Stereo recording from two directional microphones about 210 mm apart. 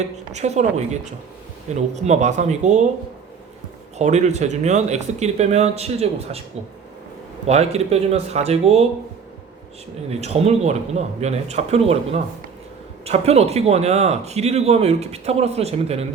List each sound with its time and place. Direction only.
0.3 s speech: 30° right (ahead or behind)
3.9 s speech: 35° right (ahead or behind)
7.4 s speech: 30° right (ahead or behind)
10.1 s speech: 30° right (ahead or behind)